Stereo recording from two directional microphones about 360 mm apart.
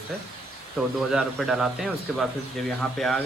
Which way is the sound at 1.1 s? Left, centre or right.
Centre.